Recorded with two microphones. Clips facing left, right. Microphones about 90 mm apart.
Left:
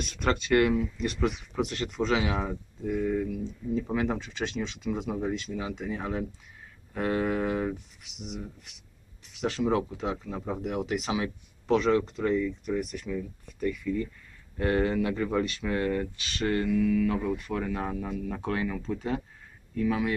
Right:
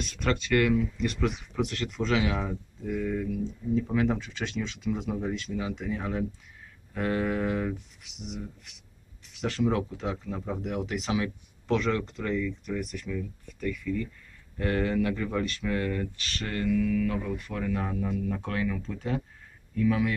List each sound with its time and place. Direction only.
0.2 s speech: 30° left (ahead or behind)
4.9 s speech: 15° left (ahead or behind)
9.4 s speech: 20° left (ahead or behind)